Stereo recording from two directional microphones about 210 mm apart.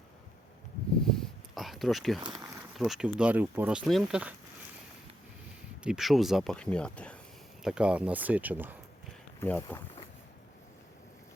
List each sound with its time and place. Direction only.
1.0 s a sound: centre (ahead or behind)
2.7 s speech: centre (ahead or behind)
5.8 s speech: centre (ahead or behind)
9.4 s speech: 10° left (ahead or behind)